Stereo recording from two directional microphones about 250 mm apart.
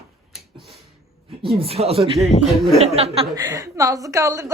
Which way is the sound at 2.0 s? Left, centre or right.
Centre.